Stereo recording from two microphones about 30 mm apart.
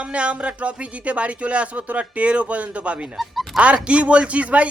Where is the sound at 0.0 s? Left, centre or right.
Right.